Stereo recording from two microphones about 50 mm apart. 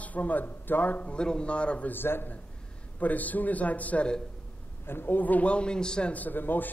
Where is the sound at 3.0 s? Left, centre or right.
Left.